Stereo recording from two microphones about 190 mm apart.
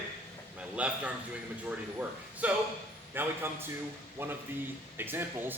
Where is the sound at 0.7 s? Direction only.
5° right (ahead or behind).